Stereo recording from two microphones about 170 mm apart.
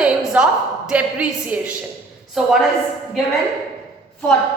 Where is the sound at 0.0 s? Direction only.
5° right (ahead or behind).